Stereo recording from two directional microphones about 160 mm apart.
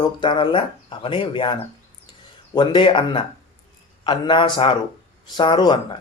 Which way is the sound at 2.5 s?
30° left (ahead or behind).